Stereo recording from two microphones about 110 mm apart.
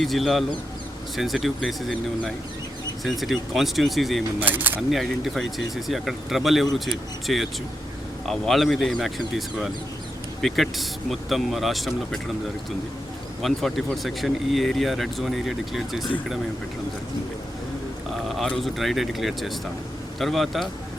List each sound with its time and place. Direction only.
0.0 s speech: centre (ahead or behind)
4.4 s speech: 15° right (ahead or behind)
4.8 s speech: centre (ahead or behind)
13.4 s speech: centre (ahead or behind)
18.3 s speech: centre (ahead or behind)